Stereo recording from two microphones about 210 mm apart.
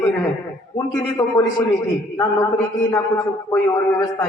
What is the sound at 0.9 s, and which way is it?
Speech, 10° left (ahead or behind).